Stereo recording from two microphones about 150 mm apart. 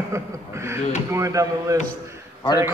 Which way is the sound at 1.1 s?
20° right (ahead or behind).